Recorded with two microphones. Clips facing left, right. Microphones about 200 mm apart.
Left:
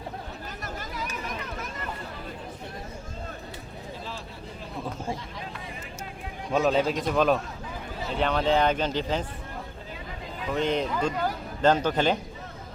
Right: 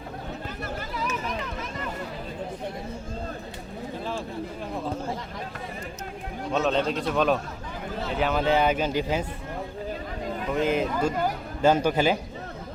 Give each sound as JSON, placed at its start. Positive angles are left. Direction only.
{"t": 0.6, "sound": "a sound", "side_deg": 40}
{"t": 6.5, "sound": "speech", "side_deg": 5}
{"t": 10.5, "sound": "a man's voice", "side_deg": -5}